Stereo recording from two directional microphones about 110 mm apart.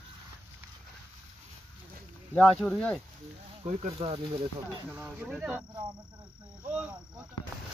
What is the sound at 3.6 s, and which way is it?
Speech, 65° right (ahead or behind).